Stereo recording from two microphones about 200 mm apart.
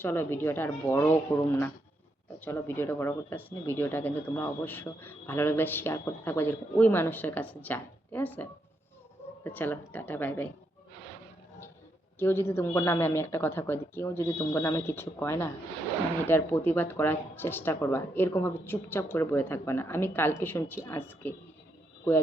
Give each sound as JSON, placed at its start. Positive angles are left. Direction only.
{"t": 0.0, "sound": "speech", "side_deg": 10}
{"t": 12.2, "sound": "speech", "side_deg": 10}